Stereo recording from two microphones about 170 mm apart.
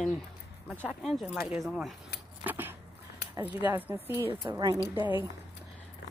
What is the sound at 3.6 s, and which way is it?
A woman's voice, 15° right (ahead or behind).